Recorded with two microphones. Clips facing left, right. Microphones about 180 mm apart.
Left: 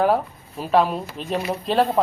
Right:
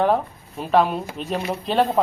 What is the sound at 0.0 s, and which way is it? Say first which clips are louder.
A man's voice: even; 5° left (ahead or behind).